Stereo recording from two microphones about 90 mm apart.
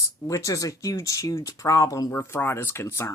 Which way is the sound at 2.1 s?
25° left (ahead or behind).